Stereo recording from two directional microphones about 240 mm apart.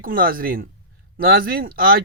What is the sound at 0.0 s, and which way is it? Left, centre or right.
Speech, right.